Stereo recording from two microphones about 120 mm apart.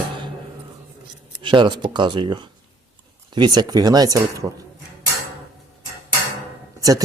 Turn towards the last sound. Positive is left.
turn(degrees=-30)  # may be behind; listen again after turning